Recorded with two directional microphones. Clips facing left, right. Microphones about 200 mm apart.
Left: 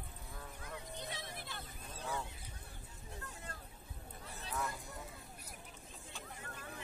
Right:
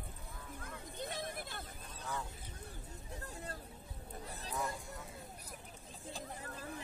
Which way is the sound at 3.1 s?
35° right (ahead or behind).